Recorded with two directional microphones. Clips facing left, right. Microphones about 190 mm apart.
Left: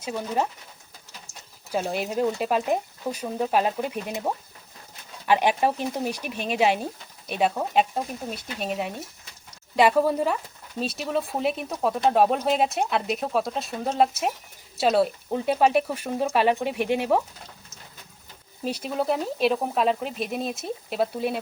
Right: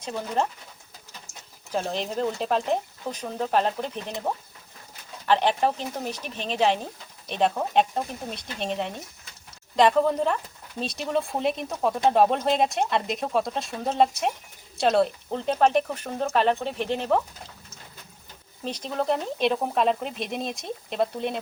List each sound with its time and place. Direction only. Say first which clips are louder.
0.0 s speech: left 1 dB; 10° left (ahead or behind)
1.7 s speech: left 2 dB; 10° left (ahead or behind)
18.6 s speech: left 1 dB; 10° left (ahead or behind)